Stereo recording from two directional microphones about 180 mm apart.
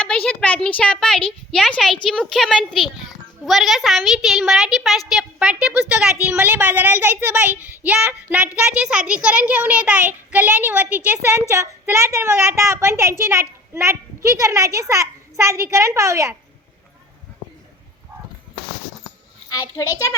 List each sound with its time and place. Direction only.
0.0 s a woman's voice: 5° left (ahead or behind); by 16.4 s 15° right (ahead or behind)
19.5 s a child's voice: 20° left (ahead or behind)